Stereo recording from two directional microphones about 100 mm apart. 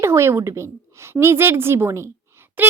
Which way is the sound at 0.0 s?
25° right (ahead or behind).